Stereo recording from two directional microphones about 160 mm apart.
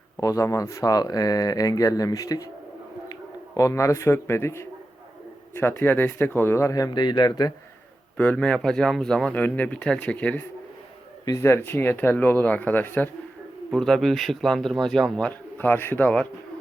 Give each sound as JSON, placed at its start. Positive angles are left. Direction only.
{"t": 0.2, "sound": "a man's voice", "side_deg": 20}
{"t": 8.1, "sound": "a man's voice", "side_deg": 10}